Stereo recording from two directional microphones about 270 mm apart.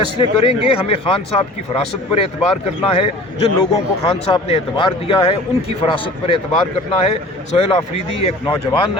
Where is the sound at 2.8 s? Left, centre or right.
Left.